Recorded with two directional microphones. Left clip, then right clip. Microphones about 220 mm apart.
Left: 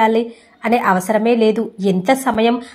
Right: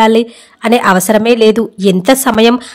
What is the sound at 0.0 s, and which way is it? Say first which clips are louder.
A woman's voice: right 6 dB; 40° right (ahead or behind).